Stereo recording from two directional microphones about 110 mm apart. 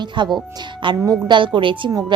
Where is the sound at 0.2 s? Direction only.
45° right (ahead or behind).